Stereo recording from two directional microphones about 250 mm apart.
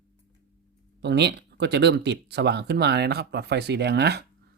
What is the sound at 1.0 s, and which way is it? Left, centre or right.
Speech, right.